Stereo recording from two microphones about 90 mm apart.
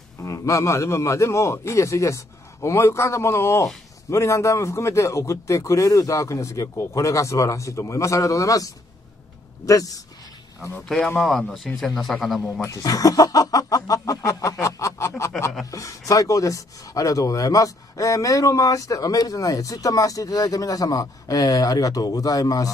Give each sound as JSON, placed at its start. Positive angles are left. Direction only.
{"t": 0.2, "sound": "speech", "side_deg": 35}
{"t": 11.1, "sound": "a man's voice", "side_deg": 5}
{"t": 12.6, "sound": "speech", "side_deg": 40}